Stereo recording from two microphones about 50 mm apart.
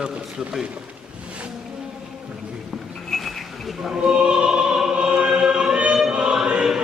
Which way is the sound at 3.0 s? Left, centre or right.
Centre.